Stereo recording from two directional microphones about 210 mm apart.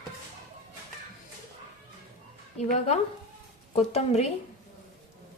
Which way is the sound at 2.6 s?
30° left (ahead or behind).